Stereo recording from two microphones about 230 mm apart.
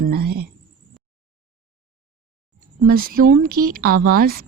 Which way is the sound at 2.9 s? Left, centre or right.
Right.